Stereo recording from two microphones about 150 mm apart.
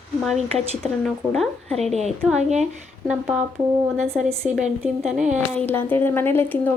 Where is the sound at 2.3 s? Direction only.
50° right (ahead or behind).